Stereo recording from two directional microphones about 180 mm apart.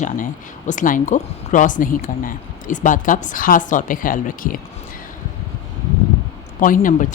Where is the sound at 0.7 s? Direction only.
45° left (ahead or behind).